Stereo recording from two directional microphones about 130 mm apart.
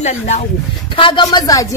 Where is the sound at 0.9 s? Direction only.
40° left (ahead or behind).